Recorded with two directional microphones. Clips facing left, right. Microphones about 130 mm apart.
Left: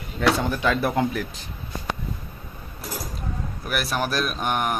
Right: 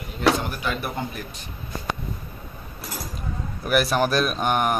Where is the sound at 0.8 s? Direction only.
90° left.